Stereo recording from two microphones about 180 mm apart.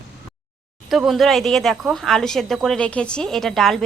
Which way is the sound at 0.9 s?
Centre (ahead or behind).